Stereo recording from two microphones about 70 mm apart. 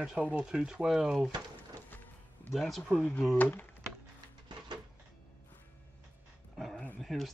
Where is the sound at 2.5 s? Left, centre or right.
Centre.